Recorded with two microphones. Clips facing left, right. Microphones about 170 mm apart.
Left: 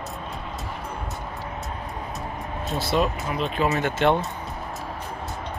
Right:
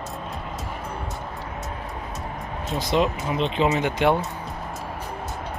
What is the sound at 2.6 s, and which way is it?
Speech, 15° right (ahead or behind).